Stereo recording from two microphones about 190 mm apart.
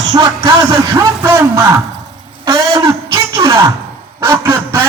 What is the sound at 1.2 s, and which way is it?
Speech, 15° right (ahead or behind).